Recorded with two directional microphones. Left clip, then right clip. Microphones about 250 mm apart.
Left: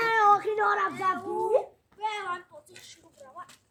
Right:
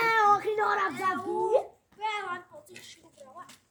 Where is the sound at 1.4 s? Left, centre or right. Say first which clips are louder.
Left 1 dB; centre.